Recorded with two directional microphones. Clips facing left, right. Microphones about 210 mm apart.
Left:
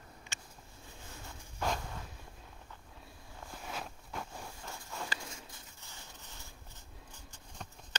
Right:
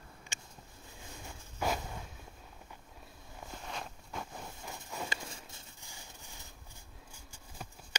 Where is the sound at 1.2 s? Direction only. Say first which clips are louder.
Right 1 dB; 10° right (ahead or behind).